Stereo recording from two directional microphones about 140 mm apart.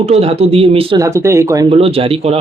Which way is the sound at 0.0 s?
45° right (ahead or behind).